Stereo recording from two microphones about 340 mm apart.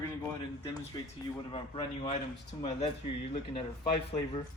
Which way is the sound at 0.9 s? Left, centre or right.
Centre.